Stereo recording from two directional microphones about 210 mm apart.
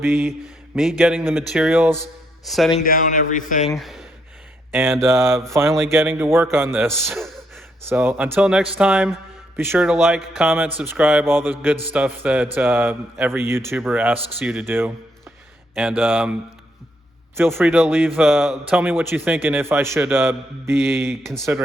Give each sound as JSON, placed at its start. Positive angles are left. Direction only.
{"t": 0.0, "sound": "a man's voice", "side_deg": -10}
{"t": 2.8, "sound": "a man's voice", "side_deg": 40}
{"t": 3.8, "sound": "a man's voice", "side_deg": 0}
{"t": 17.3, "sound": "a man's voice", "side_deg": -10}